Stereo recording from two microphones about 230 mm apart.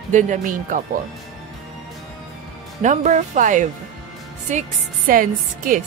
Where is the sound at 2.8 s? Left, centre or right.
Right.